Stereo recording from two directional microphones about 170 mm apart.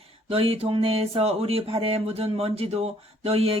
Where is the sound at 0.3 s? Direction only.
35° right (ahead or behind).